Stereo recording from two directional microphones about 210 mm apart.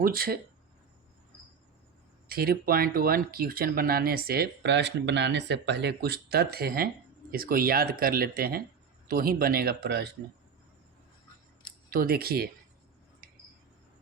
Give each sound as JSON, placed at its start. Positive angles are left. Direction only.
{"t": 0.0, "sound": "speech", "side_deg": -45}
{"t": 2.2, "sound": "speech", "side_deg": -45}
{"t": 11.9, "sound": "speech", "side_deg": -45}